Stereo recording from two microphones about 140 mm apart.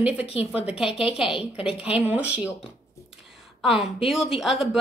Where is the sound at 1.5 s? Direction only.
45° left (ahead or behind).